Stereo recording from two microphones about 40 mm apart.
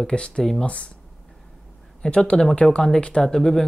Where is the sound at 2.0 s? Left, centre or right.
Left.